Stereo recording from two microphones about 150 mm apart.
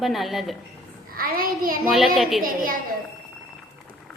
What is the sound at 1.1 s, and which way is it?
Speech, 75° right (ahead or behind).